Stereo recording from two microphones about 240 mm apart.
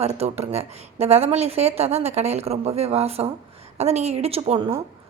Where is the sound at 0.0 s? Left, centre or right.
Right.